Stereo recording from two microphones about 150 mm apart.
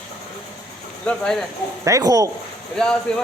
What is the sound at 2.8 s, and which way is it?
Speech, 5° left (ahead or behind).